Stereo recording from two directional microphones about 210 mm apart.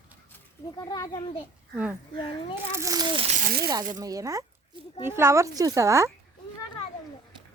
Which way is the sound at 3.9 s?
15° right (ahead or behind).